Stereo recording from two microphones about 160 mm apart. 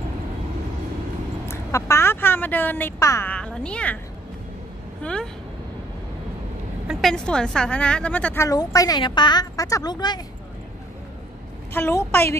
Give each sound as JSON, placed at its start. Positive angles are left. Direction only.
{"t": 1.5, "sound": "speech", "side_deg": 15}
{"t": 5.0, "sound": "a woman's voice", "side_deg": 5}
{"t": 6.9, "sound": "a woman's voice", "side_deg": 0}
{"t": 8.5, "sound": "a woman's voice", "side_deg": 20}
{"t": 11.7, "sound": "a woman's voice", "side_deg": 15}